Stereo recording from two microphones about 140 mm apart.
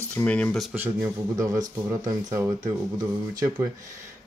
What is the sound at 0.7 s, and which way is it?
Speech, 15° right (ahead or behind).